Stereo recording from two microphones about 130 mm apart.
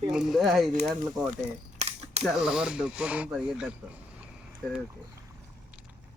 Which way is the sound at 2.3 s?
5° right (ahead or behind).